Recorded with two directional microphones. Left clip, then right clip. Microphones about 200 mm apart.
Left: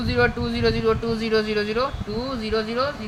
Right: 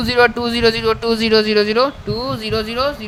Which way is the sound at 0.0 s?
55° right (ahead or behind).